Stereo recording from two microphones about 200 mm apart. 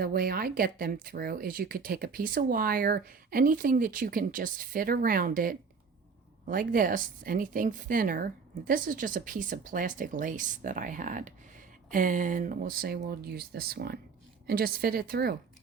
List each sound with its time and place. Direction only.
0.0 s speech: 50° right (ahead or behind)